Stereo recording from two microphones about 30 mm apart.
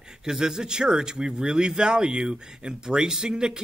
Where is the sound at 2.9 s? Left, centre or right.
Centre.